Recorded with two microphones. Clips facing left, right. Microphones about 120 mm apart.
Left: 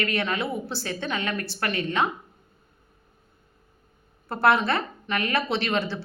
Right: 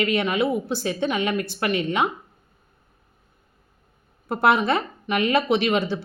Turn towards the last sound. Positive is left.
turn(degrees=-15)  # may be behind; listen again after turning